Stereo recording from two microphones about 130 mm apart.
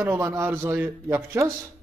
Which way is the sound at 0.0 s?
20° right (ahead or behind).